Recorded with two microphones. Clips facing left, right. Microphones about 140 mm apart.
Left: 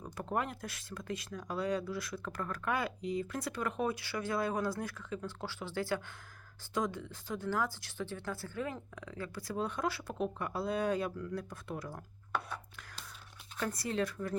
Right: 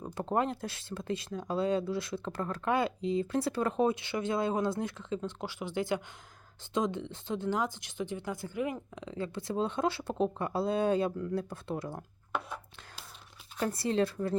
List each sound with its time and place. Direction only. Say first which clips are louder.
0.0 s speech: right 5 dB; 30° right (ahead or behind)
13.6 s speech: right 5 dB; 30° right (ahead or behind)